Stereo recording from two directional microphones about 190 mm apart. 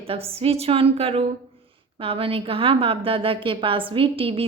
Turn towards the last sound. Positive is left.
turn(degrees=-30)  # may be behind; listen again after turning